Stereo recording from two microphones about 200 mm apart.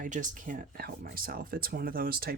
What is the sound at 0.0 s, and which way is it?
Speech, 40° right (ahead or behind).